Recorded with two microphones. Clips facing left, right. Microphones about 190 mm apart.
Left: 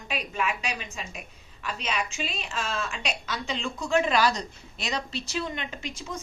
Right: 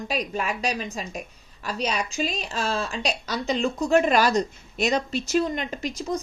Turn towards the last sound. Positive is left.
turn(degrees=-40)  # may be behind; listen again after turning